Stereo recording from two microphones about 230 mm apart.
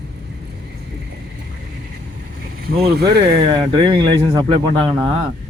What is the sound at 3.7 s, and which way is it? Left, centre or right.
Speech, right.